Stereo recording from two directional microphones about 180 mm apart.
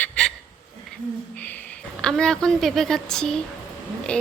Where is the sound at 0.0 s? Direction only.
5° left (ahead or behind).